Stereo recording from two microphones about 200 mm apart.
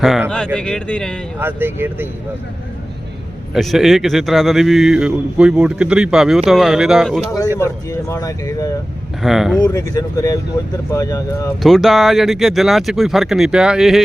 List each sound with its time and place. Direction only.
0.0 s speech: centre (ahead or behind)
1.4 s speech: 10° right (ahead or behind)
3.5 s speech: centre (ahead or behind)
7.6 s speech: 15° left (ahead or behind)
9.2 s speech: centre (ahead or behind)
9.6 s speech: 15° left (ahead or behind)
11.6 s speech: centre (ahead or behind)